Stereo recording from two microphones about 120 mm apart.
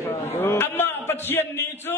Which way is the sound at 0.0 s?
20° left (ahead or behind).